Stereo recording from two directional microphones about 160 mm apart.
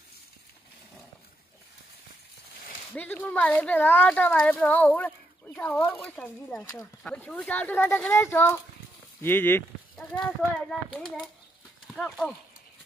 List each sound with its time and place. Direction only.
2.9 s speech: 10° left (ahead or behind)
6.6 s speech: 20° left (ahead or behind)
7.0 s speech: 5° left (ahead or behind)